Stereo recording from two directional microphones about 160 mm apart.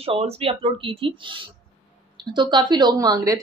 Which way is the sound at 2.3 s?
30° right (ahead or behind).